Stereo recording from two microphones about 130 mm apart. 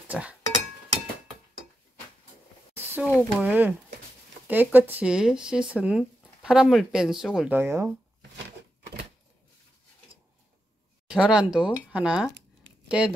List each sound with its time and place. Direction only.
0.1 s speech: 10° right (ahead or behind)
2.7 s a sound: 15° right (ahead or behind)
3.2 s speech: 15° right (ahead or behind)
7.5 s speech: 20° right (ahead or behind)
11.1 s speech: 5° right (ahead or behind)